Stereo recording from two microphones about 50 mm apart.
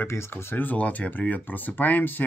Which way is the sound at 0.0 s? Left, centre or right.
Left.